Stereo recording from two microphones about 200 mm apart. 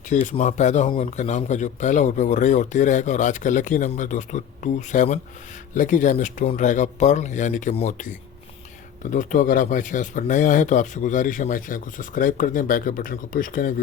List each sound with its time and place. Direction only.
0.1 s speech: 35° left (ahead or behind)